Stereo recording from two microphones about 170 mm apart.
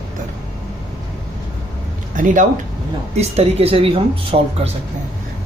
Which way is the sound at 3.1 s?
40° right (ahead or behind).